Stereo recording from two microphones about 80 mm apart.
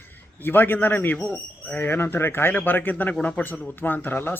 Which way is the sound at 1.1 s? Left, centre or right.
Centre.